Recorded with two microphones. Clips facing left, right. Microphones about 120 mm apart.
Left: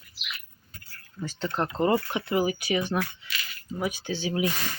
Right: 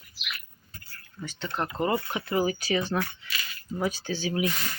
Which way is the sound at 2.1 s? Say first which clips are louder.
Left 1 dB; 20° left (ahead or behind).